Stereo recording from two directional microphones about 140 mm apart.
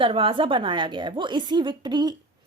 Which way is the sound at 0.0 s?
40° right (ahead or behind).